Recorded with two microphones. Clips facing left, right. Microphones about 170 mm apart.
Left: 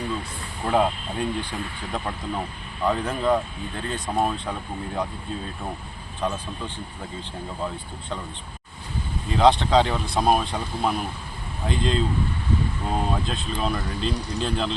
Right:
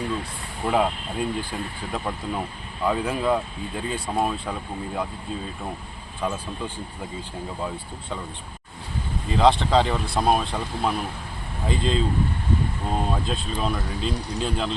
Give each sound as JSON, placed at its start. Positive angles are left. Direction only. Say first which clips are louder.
{"t": 0.6, "sound": "speech", "louder": "left 1 dB", "side_deg": -5}
{"t": 6.2, "sound": "speech", "louder": "even", "side_deg": -5}
{"t": 9.3, "sound": "speech", "louder": "left 1 dB", "side_deg": 0}